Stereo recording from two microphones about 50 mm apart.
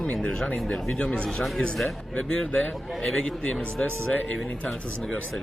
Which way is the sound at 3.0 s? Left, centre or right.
Centre.